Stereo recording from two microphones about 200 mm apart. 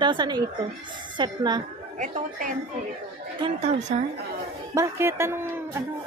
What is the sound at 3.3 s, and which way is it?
Speech, 25° right (ahead or behind).